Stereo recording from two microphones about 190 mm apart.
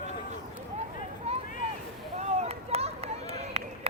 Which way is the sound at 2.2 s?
35° right (ahead or behind).